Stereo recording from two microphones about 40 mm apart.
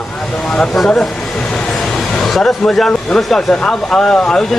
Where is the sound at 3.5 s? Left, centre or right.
Centre.